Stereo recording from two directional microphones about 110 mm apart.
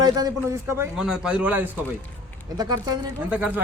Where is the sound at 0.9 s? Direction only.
5° right (ahead or behind).